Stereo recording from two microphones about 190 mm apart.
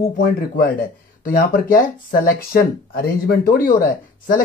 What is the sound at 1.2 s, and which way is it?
Speech, 50° left (ahead or behind).